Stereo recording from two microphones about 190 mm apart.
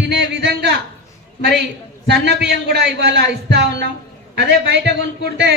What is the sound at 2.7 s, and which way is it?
A man's voice, 60° right (ahead or behind).